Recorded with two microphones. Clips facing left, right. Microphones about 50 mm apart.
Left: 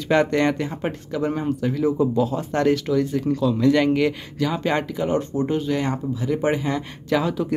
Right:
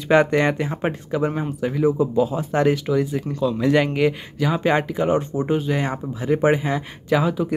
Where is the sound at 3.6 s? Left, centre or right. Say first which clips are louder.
Even; centre.